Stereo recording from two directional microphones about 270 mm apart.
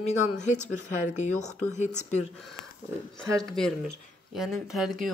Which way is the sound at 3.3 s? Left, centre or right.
Centre.